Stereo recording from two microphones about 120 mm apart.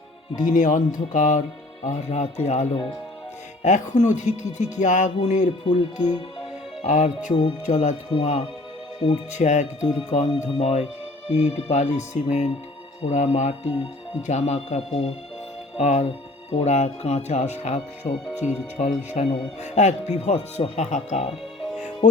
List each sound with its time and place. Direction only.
0.3 s speech: 90° left
1.8 s speech: 75° left (ahead or behind)
3.6 s music: 90° left
5.2 s speech: 90° left
5.6 s speech: 40° left (ahead or behind)
6.8 s speech: 85° left
7.7 s music: 80° left
8.2 s speech: 70° left (ahead or behind)